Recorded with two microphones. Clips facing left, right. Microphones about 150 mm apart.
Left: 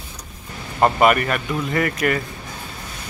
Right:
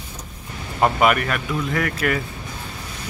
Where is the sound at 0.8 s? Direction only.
Centre (ahead or behind).